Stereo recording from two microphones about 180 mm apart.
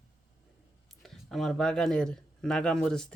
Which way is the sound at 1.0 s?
Centre (ahead or behind).